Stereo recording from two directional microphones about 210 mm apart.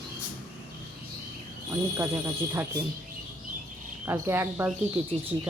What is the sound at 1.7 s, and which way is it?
Speech, 10° right (ahead or behind).